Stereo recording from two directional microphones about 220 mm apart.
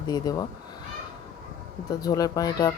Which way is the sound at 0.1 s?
20° left (ahead or behind).